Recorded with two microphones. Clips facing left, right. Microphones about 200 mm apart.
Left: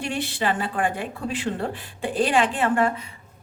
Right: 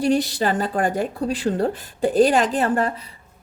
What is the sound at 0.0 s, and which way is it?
A woman's voice, 40° right (ahead or behind).